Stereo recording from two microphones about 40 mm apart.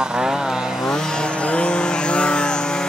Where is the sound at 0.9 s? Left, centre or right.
Centre.